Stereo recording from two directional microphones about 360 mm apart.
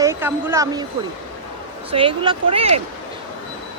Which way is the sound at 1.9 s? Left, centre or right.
Centre.